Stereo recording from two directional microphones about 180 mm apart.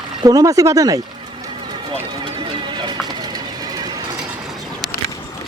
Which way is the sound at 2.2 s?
30° right (ahead or behind).